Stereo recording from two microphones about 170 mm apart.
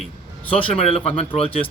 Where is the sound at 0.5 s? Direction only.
35° left (ahead or behind).